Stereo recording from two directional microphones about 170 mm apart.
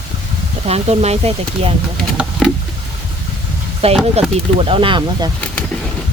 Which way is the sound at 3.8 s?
35° right (ahead or behind).